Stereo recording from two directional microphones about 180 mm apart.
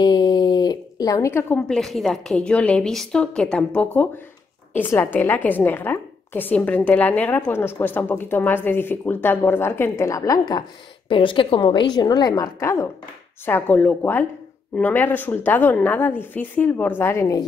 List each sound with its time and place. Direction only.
0.0 s a woman's voice: 25° left (ahead or behind)